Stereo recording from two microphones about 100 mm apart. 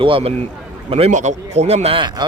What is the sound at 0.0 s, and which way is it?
Speech, 65° right (ahead or behind).